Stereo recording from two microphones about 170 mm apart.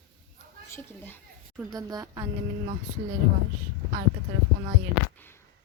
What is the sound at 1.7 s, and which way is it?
Speech, 20° right (ahead or behind).